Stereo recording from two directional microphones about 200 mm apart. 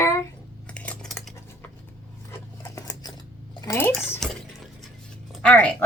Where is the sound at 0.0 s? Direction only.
15° left (ahead or behind).